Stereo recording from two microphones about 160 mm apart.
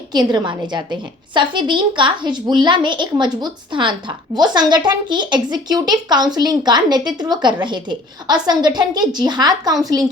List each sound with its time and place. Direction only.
0.1 s a woman's voice: 25° right (ahead or behind)